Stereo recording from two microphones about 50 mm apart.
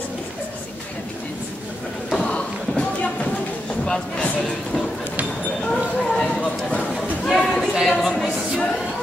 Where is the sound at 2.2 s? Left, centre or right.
Left.